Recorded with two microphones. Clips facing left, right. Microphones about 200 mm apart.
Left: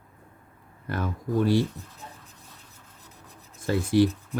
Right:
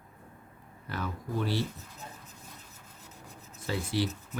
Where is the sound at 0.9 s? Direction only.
50° left (ahead or behind).